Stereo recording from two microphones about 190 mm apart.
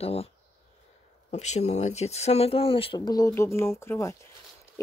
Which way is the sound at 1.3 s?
35° left (ahead or behind).